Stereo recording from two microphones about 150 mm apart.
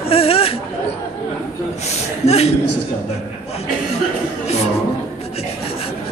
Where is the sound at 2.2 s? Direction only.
45° left (ahead or behind).